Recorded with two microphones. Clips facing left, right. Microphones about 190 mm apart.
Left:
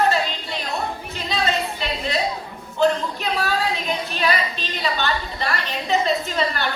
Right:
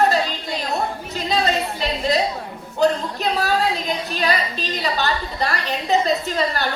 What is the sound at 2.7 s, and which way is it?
A woman's voice, 40° right (ahead or behind).